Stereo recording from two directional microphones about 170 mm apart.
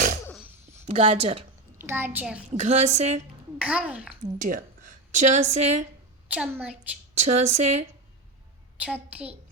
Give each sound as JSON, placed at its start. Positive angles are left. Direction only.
{"t": 0.9, "sound": "speech", "side_deg": -35}
{"t": 1.8, "sound": "a child's voice", "side_deg": -15}
{"t": 2.6, "sound": "speech", "side_deg": -40}
{"t": 3.6, "sound": "a child's voice", "side_deg": -5}
{"t": 4.4, "sound": "a woman's voice", "side_deg": -50}
{"t": 6.2, "sound": "a child's voice", "side_deg": -10}
{"t": 7.2, "sound": "speech", "side_deg": -40}
{"t": 8.8, "sound": "a child's voice", "side_deg": -10}